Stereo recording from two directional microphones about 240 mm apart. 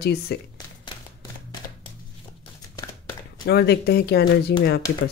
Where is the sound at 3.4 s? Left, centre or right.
Left.